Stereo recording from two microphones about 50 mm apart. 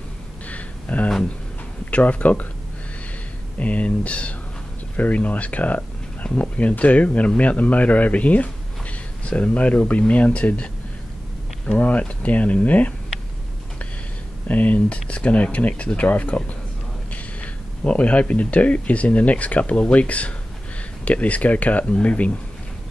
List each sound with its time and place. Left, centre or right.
0.5 s a sound: left
1.9 s speech: left
3.5 s speech: left
11.7 s speech: left
14.5 s speech: left